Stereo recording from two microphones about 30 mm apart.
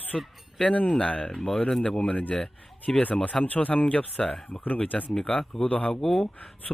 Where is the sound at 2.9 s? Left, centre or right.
Centre.